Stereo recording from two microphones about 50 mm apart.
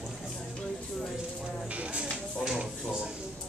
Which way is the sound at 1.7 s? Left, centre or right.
Right.